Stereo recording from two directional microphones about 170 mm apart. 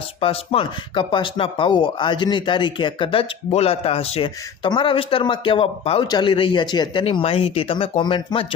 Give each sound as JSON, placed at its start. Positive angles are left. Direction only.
{"t": 0.2, "sound": "speech", "side_deg": 35}